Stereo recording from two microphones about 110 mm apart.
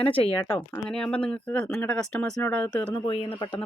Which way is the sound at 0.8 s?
5° left (ahead or behind).